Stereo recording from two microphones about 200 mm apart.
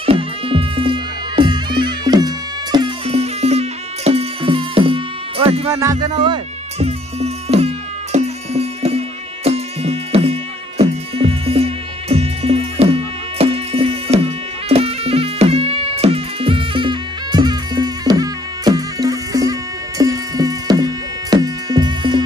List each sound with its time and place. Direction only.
0.0 s music: 30° right (ahead or behind)
5.7 s music: 15° right (ahead or behind)